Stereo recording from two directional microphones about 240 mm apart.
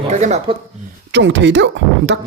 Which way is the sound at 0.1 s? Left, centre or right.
Right.